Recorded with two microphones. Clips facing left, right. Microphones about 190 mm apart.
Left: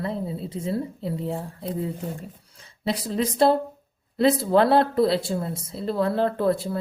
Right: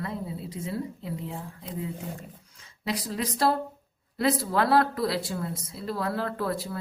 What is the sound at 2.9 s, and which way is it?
Speech, 25° left (ahead or behind).